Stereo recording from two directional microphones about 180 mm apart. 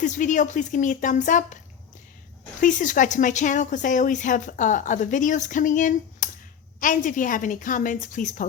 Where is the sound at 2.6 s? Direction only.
45° left (ahead or behind).